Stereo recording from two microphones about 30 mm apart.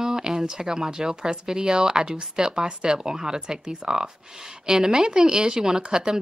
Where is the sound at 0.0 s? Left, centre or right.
Centre.